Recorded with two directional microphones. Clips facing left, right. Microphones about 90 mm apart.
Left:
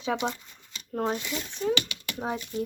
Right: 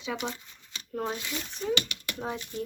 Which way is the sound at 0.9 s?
30° left (ahead or behind).